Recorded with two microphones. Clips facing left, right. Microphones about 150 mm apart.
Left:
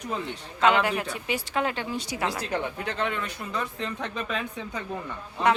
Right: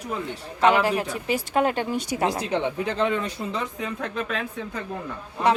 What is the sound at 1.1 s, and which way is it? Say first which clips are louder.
Speech: right 5 dB; 45° right (ahead or behind).